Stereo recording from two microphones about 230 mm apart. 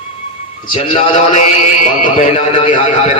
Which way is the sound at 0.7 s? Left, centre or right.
Left.